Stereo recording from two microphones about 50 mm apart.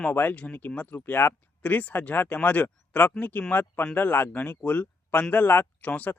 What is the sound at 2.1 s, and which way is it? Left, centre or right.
Speech, left.